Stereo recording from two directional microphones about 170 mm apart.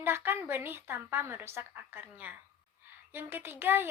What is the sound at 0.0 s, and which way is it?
A woman's voice, 15° right (ahead or behind).